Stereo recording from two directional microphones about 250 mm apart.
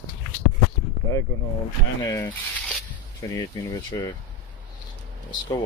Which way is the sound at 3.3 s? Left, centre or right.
Centre.